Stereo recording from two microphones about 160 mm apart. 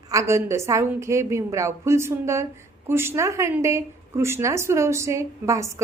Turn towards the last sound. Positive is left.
turn(degrees=-20)  # may be behind; listen again after turning